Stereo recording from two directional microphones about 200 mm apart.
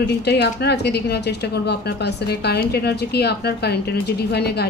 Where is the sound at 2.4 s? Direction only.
55° left (ahead or behind).